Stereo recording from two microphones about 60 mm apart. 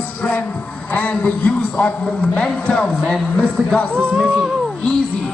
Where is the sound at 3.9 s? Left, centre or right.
Right.